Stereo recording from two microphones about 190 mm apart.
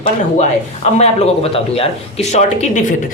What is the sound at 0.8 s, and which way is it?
Speech, 35° left (ahead or behind).